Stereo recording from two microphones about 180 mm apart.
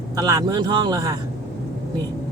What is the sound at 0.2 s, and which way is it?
Speech, 20° right (ahead or behind).